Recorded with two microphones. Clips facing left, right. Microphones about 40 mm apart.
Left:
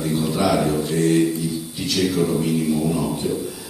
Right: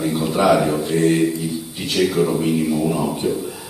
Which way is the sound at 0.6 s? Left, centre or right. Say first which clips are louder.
Right 2 dB; centre.